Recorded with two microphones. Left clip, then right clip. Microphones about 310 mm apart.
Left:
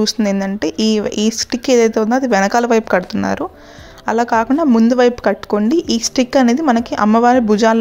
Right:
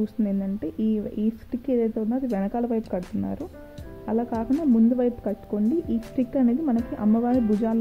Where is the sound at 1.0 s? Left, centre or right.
Left.